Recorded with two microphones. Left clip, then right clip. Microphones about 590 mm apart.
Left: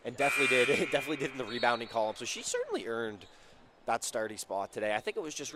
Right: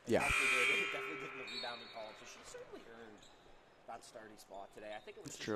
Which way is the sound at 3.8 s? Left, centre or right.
Left.